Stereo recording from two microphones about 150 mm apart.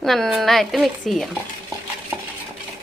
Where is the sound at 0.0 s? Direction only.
Centre (ahead or behind).